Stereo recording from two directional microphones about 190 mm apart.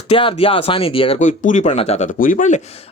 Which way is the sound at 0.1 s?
30° left (ahead or behind).